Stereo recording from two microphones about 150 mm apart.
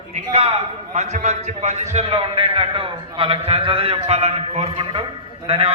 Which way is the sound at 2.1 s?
35° right (ahead or behind).